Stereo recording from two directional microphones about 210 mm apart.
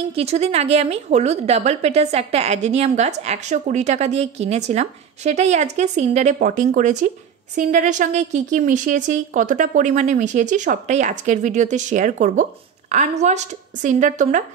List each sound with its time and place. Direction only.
0.1 s a woman's voice: 30° right (ahead or behind)